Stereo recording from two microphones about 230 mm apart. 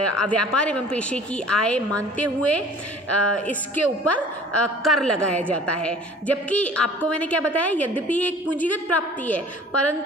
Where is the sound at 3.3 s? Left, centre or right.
Centre.